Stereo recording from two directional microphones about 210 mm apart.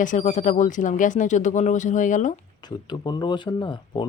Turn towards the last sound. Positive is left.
turn(degrees=20)  # may be behind; listen again after turning